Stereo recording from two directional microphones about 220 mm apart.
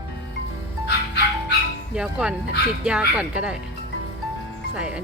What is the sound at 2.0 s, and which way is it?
Speech, 5° right (ahead or behind).